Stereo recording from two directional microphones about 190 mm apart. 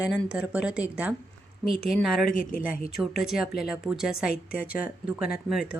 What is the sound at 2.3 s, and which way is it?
Speech, 45° left (ahead or behind).